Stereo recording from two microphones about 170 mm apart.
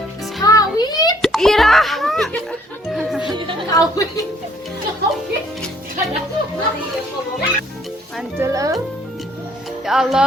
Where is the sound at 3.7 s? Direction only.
20° left (ahead or behind).